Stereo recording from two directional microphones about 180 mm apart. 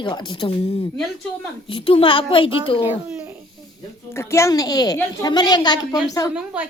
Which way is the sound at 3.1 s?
5° right (ahead or behind).